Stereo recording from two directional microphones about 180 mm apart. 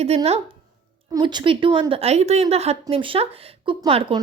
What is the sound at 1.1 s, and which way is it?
A woman's voice, 25° right (ahead or behind).